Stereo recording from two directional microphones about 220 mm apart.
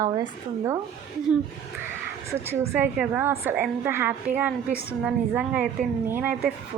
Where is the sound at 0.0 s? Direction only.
15° right (ahead or behind).